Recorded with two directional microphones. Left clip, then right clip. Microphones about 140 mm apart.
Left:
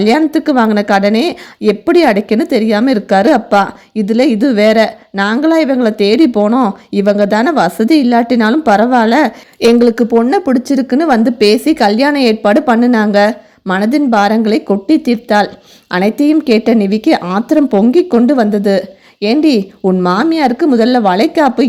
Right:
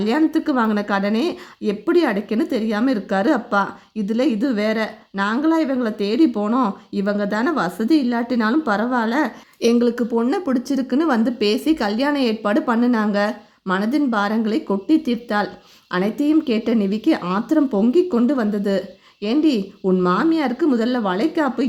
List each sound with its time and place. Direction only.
0.0 s a woman's voice: 35° left (ahead or behind)